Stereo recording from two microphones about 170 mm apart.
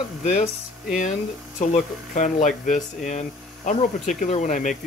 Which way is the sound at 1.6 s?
45° left (ahead or behind).